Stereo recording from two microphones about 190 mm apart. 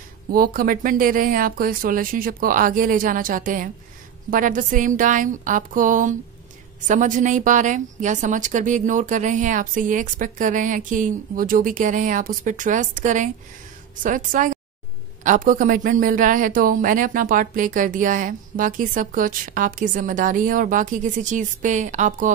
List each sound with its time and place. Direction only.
0.3 s speech: 50° right (ahead or behind)